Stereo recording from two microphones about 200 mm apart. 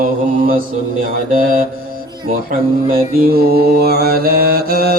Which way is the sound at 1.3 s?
40° right (ahead or behind).